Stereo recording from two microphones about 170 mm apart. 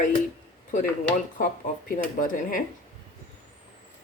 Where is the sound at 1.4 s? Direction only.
50° left (ahead or behind).